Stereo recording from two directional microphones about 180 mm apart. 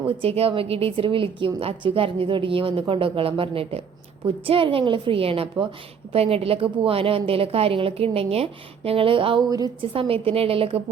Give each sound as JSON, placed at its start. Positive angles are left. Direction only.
{"t": 0.1, "sound": "a woman's voice", "side_deg": -35}